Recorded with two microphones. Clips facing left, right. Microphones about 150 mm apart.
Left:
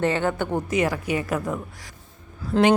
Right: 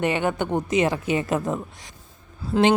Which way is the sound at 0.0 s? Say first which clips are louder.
Even; 15° right (ahead or behind).